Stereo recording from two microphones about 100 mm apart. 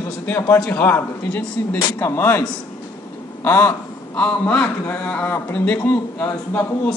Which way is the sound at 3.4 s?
20° left (ahead or behind).